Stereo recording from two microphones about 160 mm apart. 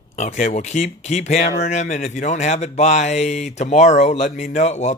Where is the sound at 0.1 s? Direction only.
50° left (ahead or behind).